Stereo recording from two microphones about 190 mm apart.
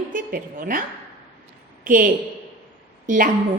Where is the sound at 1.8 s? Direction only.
45° right (ahead or behind).